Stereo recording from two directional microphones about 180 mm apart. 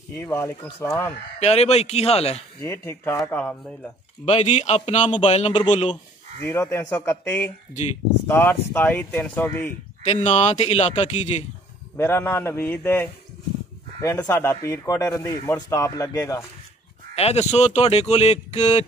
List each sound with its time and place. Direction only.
0.1 s speech: 15° left (ahead or behind)
1.4 s speech: 35° left (ahead or behind)
2.6 s speech: 15° left (ahead or behind)
4.3 s speech: 35° left (ahead or behind)
6.4 s speech: 15° left (ahead or behind)
10.0 s speech: 35° left (ahead or behind)
12.0 s speech: 15° left (ahead or behind)
17.1 s speech: 35° left (ahead or behind)